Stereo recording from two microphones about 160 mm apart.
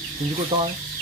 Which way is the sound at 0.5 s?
35° right (ahead or behind).